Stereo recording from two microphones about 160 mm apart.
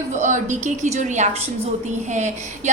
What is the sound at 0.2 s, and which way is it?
A woman's voice, 50° right (ahead or behind).